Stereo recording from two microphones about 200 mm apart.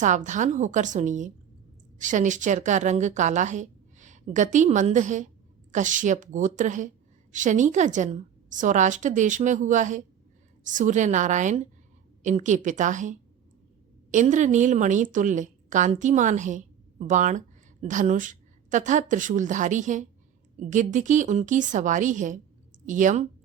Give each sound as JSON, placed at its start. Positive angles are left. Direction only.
{"t": 0.0, "sound": "a woman's voice", "side_deg": -40}